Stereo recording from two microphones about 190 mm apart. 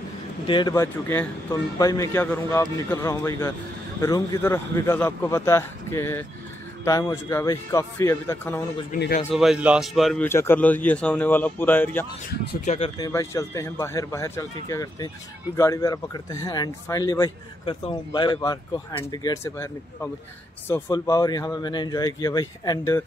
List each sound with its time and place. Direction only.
0.5 s speech: 25° left (ahead or behind)
8.9 s a man's voice: 45° left (ahead or behind)
9.3 s speech: centre (ahead or behind)
10.2 s speech: 10° left (ahead or behind)
12.3 s speech: 35° left (ahead or behind)
13.0 s speech: 15° left (ahead or behind)